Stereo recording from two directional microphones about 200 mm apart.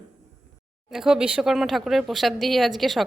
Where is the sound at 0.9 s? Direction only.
5° right (ahead or behind).